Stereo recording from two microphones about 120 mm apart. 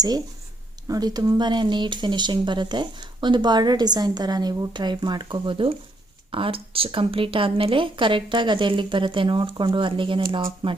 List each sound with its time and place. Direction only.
0.9 s a woman's voice: 30° right (ahead or behind)